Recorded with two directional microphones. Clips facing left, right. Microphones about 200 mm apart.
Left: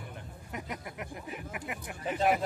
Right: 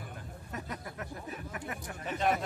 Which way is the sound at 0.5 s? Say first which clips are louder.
Left 1 dB; 15° left (ahead or behind).